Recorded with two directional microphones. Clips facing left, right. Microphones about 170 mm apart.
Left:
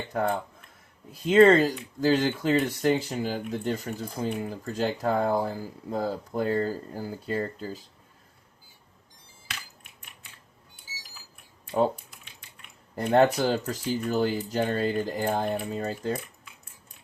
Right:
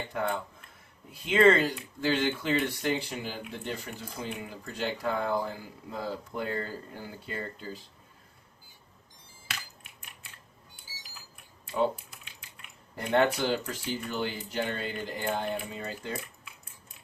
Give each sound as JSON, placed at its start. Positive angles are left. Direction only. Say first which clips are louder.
{"t": 0.1, "sound": "speech", "louder": "left 6 dB", "side_deg": 40}
{"t": 13.0, "sound": "speech", "louder": "left 5 dB", "side_deg": 40}